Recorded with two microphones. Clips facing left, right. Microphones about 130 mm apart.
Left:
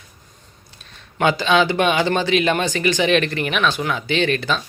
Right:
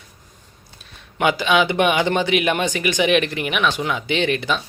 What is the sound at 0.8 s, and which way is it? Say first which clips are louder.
Speech: left 1 dB; 15° right (ahead or behind).